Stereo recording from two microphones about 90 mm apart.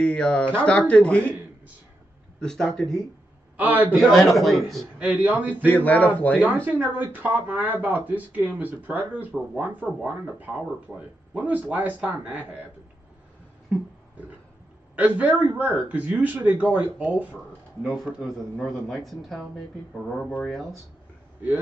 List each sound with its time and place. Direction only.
0.0 s speech: 10° left (ahead or behind)
2.4 s speech: 10° left (ahead or behind)
3.5 s speech: 20° right (ahead or behind)
4.1 s speech: centre (ahead or behind)
4.9 s speech: 15° right (ahead or behind)
5.7 s speech: 15° left (ahead or behind)
6.4 s speech: 20° right (ahead or behind)
15.0 s speech: 20° right (ahead or behind)
17.8 s speech: centre (ahead or behind)